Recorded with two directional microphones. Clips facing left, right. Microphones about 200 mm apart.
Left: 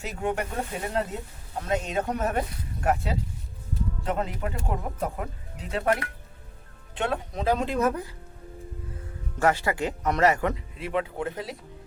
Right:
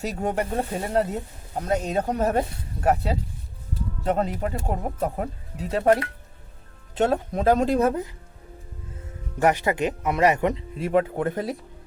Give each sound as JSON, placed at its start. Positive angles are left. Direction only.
{"t": 0.0, "sound": "speech", "side_deg": -40}
{"t": 9.4, "sound": "speech", "side_deg": -20}
{"t": 10.8, "sound": "speech", "side_deg": -45}